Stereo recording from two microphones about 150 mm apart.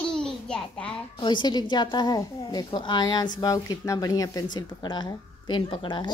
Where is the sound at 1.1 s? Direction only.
30° left (ahead or behind).